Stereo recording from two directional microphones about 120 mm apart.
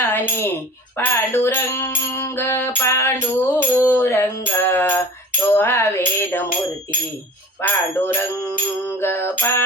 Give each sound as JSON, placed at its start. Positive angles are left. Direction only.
{"t": 0.0, "sound": "music", "side_deg": 20}
{"t": 7.6, "sound": "music", "side_deg": 15}